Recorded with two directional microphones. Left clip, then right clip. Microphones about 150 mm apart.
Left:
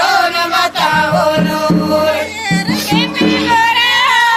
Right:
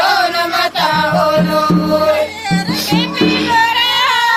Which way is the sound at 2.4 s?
55° right (ahead or behind).